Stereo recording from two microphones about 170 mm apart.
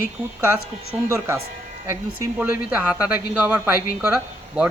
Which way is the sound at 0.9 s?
5° right (ahead or behind).